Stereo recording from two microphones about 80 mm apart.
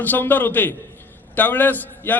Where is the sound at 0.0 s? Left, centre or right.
Left.